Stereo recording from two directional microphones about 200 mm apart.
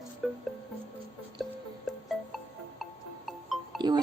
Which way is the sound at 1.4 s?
Centre (ahead or behind).